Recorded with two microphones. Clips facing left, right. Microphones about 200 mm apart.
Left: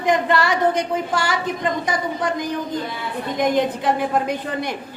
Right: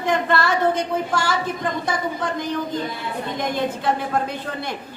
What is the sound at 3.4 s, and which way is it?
Speech, 15° left (ahead or behind).